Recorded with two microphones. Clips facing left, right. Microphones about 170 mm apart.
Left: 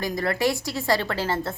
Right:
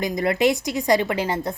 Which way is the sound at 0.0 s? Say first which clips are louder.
Right 4 dB; 20° right (ahead or behind).